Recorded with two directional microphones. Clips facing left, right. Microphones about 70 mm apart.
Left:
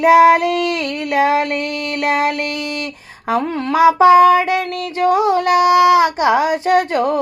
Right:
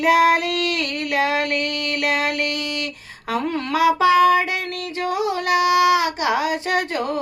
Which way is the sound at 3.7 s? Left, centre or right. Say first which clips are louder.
Left 7 dB; left.